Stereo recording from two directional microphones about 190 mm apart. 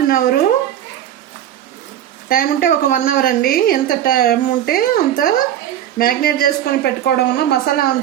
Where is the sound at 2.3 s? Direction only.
45° left (ahead or behind).